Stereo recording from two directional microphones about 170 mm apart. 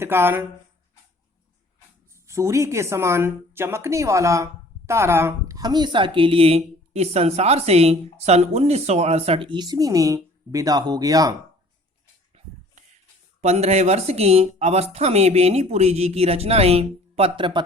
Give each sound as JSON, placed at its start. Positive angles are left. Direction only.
{"t": 0.0, "sound": "speech", "side_deg": -15}
{"t": 2.2, "sound": "speech", "side_deg": -15}
{"t": 13.4, "sound": "speech", "side_deg": -40}